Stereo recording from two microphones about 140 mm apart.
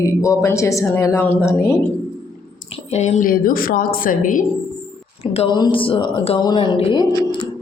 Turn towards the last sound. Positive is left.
turn(degrees=35)  # may be behind; listen again after turning